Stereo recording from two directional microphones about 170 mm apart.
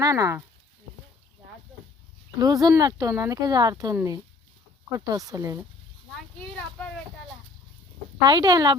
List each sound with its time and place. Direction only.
0.0 s speech: 20° right (ahead or behind)
2.4 s speech: 20° right (ahead or behind)
8.2 s speech: 25° right (ahead or behind)